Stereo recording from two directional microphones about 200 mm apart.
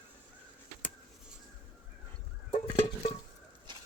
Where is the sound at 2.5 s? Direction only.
30° left (ahead or behind).